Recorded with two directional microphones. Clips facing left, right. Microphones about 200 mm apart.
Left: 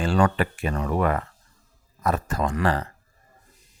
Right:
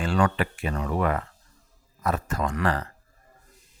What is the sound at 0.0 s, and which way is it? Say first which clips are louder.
Speech: left 2 dB; 35° left (ahead or behind).